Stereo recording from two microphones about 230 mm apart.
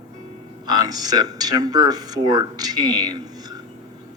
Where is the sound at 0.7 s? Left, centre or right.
Centre.